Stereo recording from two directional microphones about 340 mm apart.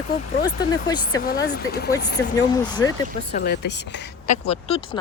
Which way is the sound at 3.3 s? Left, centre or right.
Left.